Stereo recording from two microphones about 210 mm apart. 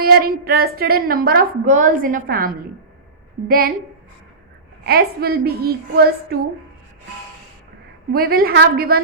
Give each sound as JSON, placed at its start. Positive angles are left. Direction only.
{"t": 0.0, "sound": "a woman's voice", "side_deg": -45}
{"t": 4.8, "sound": "a woman's voice", "side_deg": -45}
{"t": 8.1, "sound": "a woman's voice", "side_deg": -45}